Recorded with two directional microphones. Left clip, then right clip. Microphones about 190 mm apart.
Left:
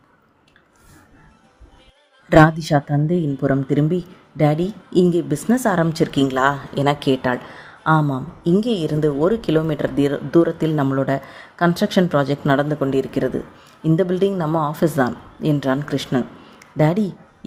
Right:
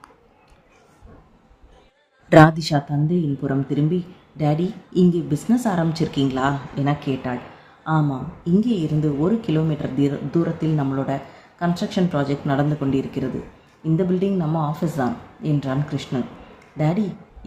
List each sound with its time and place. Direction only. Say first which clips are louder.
2.3 s speech: even; centre (ahead or behind)
2.6 s speech: left 4 dB; 40° left (ahead or behind)
9.2 s speech: left 4 dB; 50° left (ahead or behind)